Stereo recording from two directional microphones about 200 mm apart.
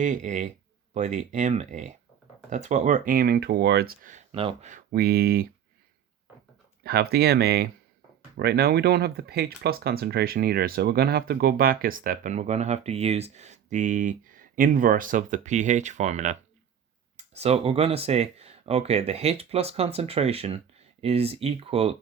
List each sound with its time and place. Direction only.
0.0 s speech: 40° right (ahead or behind)
4.7 s speech: 45° right (ahead or behind)
6.8 s speech: 50° right (ahead or behind); by 21.9 s 30° right (ahead or behind)